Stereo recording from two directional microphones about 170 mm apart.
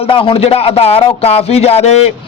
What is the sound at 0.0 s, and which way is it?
A man's voice, 30° left (ahead or behind).